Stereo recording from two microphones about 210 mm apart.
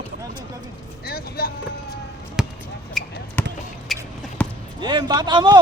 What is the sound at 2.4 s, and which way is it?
Basketball bounce, centre (ahead or behind).